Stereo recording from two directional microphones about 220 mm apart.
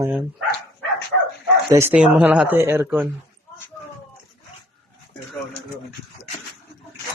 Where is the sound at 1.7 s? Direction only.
10° right (ahead or behind).